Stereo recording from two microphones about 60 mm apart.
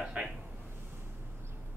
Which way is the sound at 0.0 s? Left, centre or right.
Centre.